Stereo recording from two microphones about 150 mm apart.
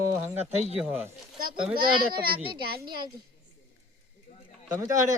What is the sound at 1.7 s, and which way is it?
Speech, 30° right (ahead or behind).